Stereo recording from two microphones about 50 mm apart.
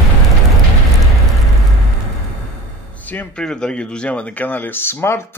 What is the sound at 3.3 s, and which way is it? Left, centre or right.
Speech, centre.